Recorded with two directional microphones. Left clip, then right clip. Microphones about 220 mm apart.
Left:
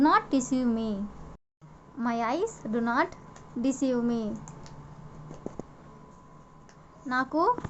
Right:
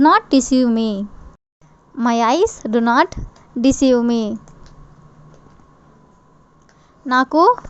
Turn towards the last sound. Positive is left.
turn(degrees=-40)  # may be behind; listen again after turning